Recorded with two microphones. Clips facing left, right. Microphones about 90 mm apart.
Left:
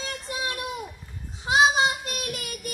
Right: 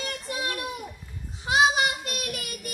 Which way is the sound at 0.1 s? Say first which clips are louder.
Even; 20° left (ahead or behind).